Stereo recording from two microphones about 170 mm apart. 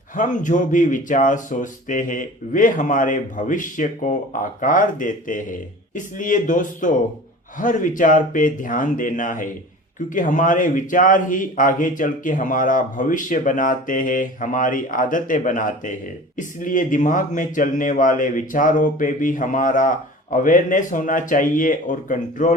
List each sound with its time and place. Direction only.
0.2 s speech: 50° left (ahead or behind)